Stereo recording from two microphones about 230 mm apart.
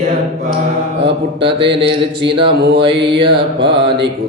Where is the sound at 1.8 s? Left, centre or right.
Right.